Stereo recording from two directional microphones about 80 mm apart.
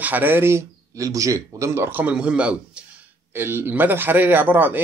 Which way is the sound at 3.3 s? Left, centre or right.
Right.